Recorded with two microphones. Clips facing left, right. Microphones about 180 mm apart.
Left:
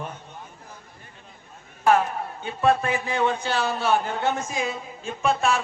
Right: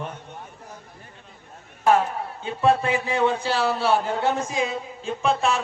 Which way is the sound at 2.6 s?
30° right (ahead or behind).